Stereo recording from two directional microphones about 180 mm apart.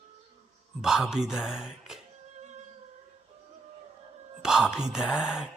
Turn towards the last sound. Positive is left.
turn(degrees=-5)  # may be behind; listen again after turning